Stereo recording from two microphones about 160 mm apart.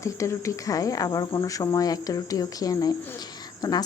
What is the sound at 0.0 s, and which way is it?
Speech, 20° left (ahead or behind).